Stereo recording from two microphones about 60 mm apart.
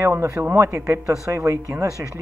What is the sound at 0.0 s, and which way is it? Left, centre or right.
Speech, right.